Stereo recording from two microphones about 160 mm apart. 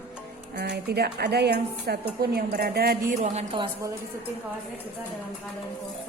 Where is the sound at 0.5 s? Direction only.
90° right.